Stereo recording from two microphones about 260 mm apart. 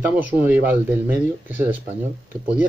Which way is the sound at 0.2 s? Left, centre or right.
Centre.